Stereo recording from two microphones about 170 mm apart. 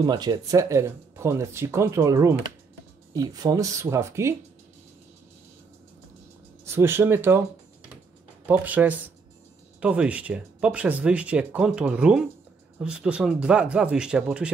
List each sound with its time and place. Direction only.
0.0 s speech: 25° right (ahead or behind)
6.6 s speech: 15° right (ahead or behind)
8.5 s speech: 10° right (ahead or behind)